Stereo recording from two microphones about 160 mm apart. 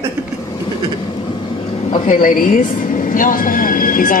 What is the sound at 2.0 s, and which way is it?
A woman's voice, 55° left (ahead or behind).